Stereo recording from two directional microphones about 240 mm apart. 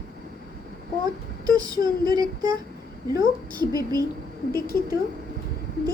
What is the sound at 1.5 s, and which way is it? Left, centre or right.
Speech, centre.